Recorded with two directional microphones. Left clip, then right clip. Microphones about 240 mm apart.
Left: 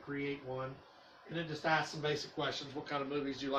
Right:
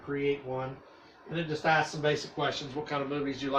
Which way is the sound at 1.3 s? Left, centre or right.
Centre.